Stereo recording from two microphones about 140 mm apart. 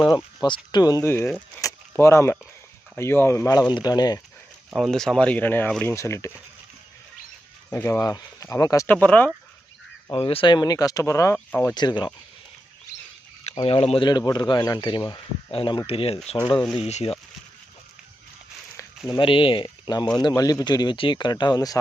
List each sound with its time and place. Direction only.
0.4 s speech: 35° left (ahead or behind)
4.7 s speech: 5° left (ahead or behind); by 6.3 s 20° left (ahead or behind)
7.7 s speech: 20° left (ahead or behind)
8.9 s speech: 10° left (ahead or behind)
10.1 s speech: 40° left (ahead or behind); by 11.7 s 20° left (ahead or behind)
11.7 s speech: 30° left (ahead or behind)
13.6 s speech: 35° left (ahead or behind)
14.1 s speech: 30° left (ahead or behind); by 17.2 s 45° left (ahead or behind)
19.1 s speech: 40° left (ahead or behind)